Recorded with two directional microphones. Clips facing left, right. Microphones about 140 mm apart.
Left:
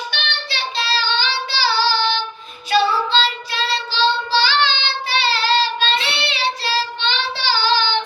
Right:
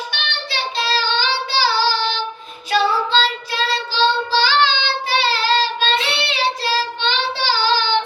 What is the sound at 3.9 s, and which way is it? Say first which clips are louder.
Child singing: right 1 dB; 45° right (ahead or behind).